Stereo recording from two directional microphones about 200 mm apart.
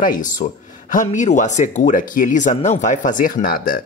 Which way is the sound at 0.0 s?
40° left (ahead or behind).